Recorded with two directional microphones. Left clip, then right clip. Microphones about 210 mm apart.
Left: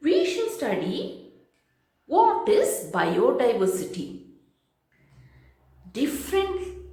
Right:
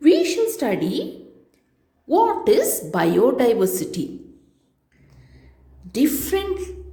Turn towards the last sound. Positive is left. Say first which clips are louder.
# right 4 dB
turn(degrees=-40)  # may be behind; listen again after turning